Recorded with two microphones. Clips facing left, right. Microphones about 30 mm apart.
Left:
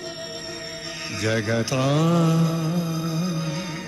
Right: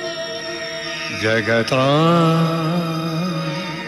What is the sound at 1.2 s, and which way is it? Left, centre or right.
Music, right.